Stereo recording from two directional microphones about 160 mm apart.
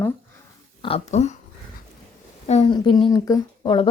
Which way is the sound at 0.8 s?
40° left (ahead or behind).